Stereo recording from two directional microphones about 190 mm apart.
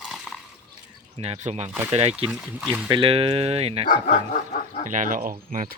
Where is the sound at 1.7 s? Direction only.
10° right (ahead or behind).